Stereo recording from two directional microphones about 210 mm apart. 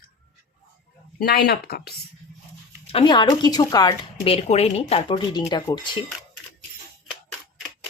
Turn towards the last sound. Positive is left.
turn(degrees=20)  # may be behind; listen again after turning